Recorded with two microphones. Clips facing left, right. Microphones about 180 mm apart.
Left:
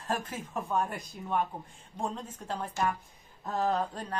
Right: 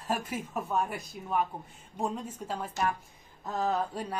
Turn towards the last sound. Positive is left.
turn(degrees=-10)  # may be behind; listen again after turning